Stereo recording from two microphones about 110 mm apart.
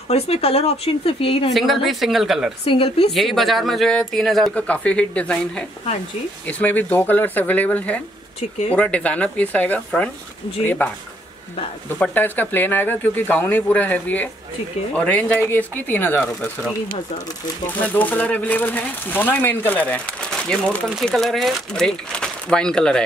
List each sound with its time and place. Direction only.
0.1 s speech: 65° left (ahead or behind)
1.5 s speech: centre (ahead or behind)
2.6 s speech: 60° left (ahead or behind)
3.1 s speech: centre (ahead or behind)
10.8 s speech: 15° left (ahead or behind)
12.0 s speech: 15° left (ahead or behind)
16.2 s speech: 5° left (ahead or behind)
17.7 s speech: 15° left (ahead or behind)